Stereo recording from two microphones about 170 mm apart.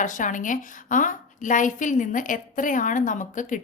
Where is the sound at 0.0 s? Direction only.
50° left (ahead or behind).